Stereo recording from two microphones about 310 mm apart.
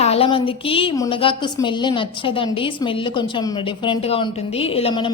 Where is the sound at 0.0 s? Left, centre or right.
Centre.